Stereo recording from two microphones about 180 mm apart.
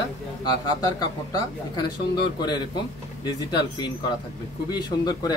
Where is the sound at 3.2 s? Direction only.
25° left (ahead or behind).